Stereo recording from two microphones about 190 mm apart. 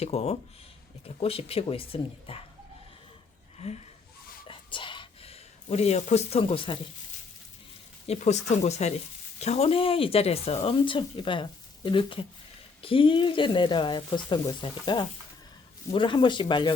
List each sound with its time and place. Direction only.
0.0 s speech: 35° left (ahead or behind)
3.6 s speech: 35° left (ahead or behind)
4.4 s whispering: 25° left (ahead or behind)
8.0 s speech: 35° left (ahead or behind)